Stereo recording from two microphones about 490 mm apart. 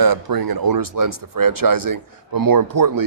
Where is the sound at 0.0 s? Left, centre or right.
Right.